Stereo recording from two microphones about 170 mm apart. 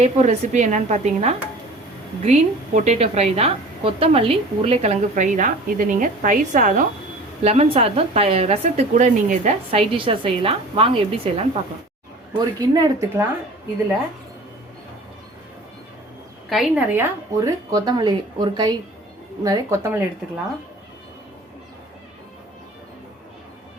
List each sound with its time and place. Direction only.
0.0 s a woman's voice: 40° right (ahead or behind)
7.4 s a woman's voice: 35° right (ahead or behind)
12.5 s speech: 20° right (ahead or behind)
16.5 s a woman's voice: centre (ahead or behind)
16.9 s speech: 15° right (ahead or behind)